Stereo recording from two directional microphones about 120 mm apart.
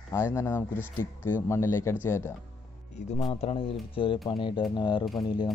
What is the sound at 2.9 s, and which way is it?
Speech, 70° left (ahead or behind).